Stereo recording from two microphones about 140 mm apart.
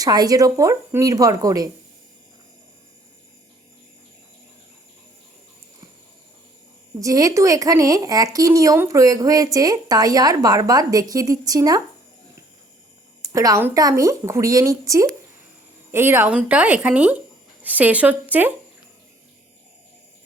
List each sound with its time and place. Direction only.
0.0 s a woman's voice: 25° right (ahead or behind)
7.0 s a woman's voice: 25° right (ahead or behind)
13.2 s a woman's voice: 25° right (ahead or behind)